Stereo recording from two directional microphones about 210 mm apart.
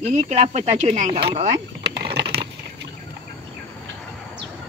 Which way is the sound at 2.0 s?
25° right (ahead or behind).